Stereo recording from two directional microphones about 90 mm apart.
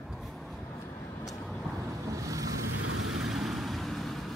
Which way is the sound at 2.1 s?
40° right (ahead or behind).